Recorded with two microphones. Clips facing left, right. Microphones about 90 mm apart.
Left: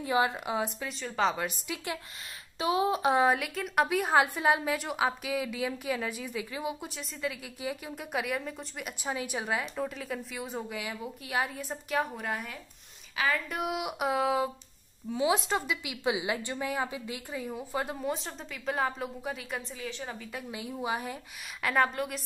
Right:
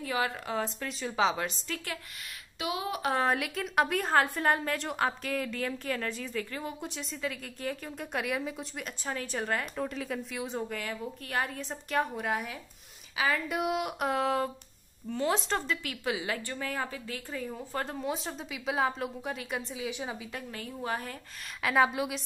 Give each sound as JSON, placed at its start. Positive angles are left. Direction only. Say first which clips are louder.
{"t": 0.0, "sound": "speech", "louder": "left 4 dB", "side_deg": 20}
{"t": 0.7, "sound": "a woman's voice", "louder": "right 1 dB", "side_deg": 0}
{"t": 2.6, "sound": "speech", "louder": "left 6 dB", "side_deg": 30}
{"t": 3.3, "sound": "a woman's voice", "louder": "even", "side_deg": 0}
{"t": 8.8, "sound": "a woman's voice", "louder": "left 3 dB", "side_deg": 10}
{"t": 20.5, "sound": "a woman's voice", "louder": "left 2 dB", "side_deg": 15}
{"t": 21.6, "sound": "a woman's voice", "louder": "right 1 dB", "side_deg": -5}